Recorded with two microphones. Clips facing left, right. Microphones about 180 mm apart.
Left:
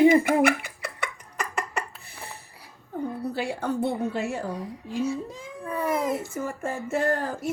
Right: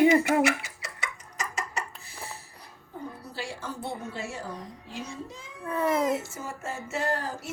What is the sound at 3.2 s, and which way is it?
Speech, 60° left (ahead or behind).